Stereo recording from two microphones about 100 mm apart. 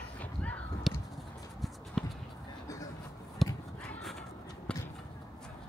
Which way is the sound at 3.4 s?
Centre (ahead or behind).